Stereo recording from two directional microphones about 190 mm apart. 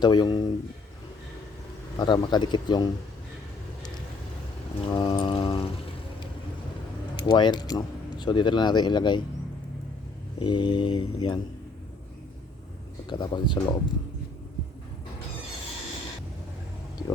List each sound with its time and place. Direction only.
0.0 s speech: 20° left (ahead or behind)
2.0 s speech: 20° left (ahead or behind)
4.9 s music: 25° left (ahead or behind)
7.2 s speech: 25° left (ahead or behind)
10.4 s speech: 25° left (ahead or behind)
13.1 s speech: 25° left (ahead or behind)